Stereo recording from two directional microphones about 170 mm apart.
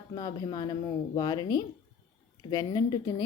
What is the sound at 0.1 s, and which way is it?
Speech, 25° left (ahead or behind).